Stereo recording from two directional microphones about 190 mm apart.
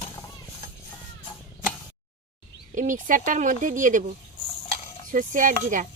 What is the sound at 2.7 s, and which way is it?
Speech, 45° right (ahead or behind).